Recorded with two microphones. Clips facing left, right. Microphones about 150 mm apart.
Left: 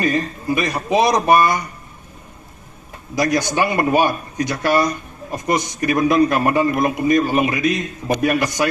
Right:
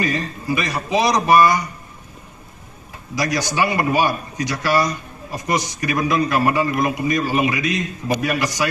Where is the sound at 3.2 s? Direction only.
50° left (ahead or behind).